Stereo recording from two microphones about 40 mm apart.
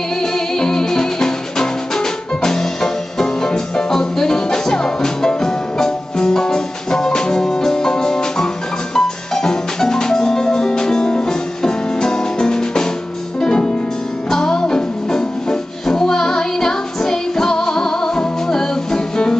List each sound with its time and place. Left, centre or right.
0.2 s music: centre